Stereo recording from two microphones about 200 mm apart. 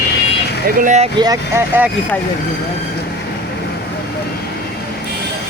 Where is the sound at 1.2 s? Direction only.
15° right (ahead or behind).